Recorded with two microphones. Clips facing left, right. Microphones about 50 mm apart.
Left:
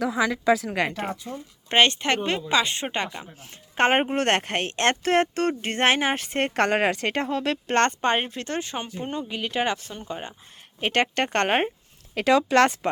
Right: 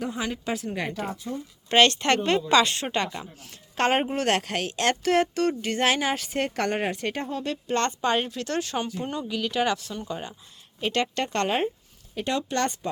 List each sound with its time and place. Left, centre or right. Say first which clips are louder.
0.7 s speech: left 4 dB; left
1.3 s a woman's voice: right 1 dB; centre
3.8 s speech: left 3 dB; left
6.7 s speech: left 4 dB; left
10.8 s speech: left 3 dB; left
12.1 s speech: left 8 dB; left